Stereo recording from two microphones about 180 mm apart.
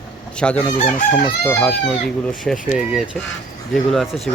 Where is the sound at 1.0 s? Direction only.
50° left (ahead or behind).